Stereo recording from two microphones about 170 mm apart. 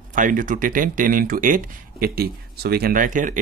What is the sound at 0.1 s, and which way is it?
Speech, 50° right (ahead or behind).